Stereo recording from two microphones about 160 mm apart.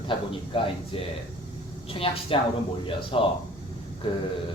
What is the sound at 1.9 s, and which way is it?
A man's voice, 35° left (ahead or behind).